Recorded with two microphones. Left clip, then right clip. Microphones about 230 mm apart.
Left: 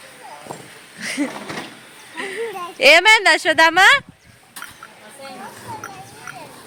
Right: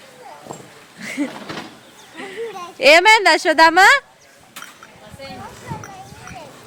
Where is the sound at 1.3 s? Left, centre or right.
Left.